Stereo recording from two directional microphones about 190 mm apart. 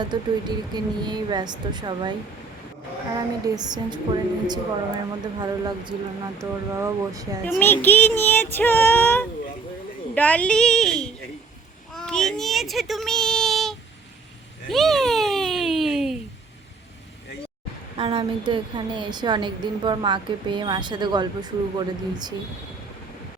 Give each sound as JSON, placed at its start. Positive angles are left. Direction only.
{"t": 0.0, "sound": "a woman's voice", "side_deg": -20}
{"t": 3.2, "sound": "a woman's voice", "side_deg": -20}
{"t": 7.6, "sound": "child singing", "side_deg": 10}
{"t": 10.2, "sound": "a woman's voice", "side_deg": 5}
{"t": 11.9, "sound": "a sound", "side_deg": 5}
{"t": 17.9, "sound": "a woman's voice", "side_deg": -25}